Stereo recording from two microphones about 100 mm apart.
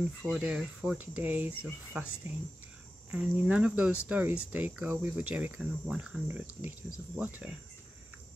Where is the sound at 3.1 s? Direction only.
10° right (ahead or behind).